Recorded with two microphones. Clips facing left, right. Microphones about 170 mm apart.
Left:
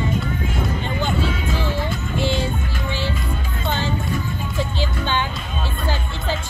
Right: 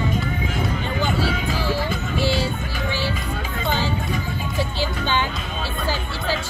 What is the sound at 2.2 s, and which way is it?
Music, 20° left (ahead or behind).